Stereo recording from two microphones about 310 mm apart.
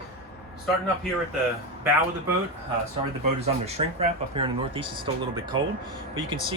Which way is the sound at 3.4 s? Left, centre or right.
Right.